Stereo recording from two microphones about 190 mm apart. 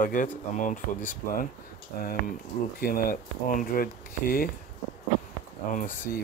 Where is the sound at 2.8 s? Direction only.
50° left (ahead or behind).